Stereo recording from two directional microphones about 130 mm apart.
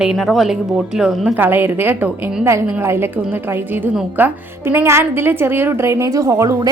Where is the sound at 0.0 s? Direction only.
5° right (ahead or behind).